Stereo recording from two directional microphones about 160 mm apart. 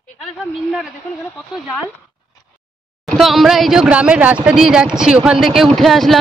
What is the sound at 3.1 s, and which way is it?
Speech, centre (ahead or behind).